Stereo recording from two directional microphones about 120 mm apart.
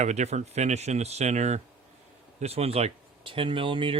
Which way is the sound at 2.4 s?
60° right (ahead or behind).